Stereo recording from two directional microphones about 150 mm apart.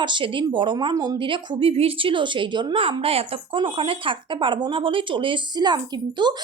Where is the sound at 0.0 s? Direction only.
30° right (ahead or behind).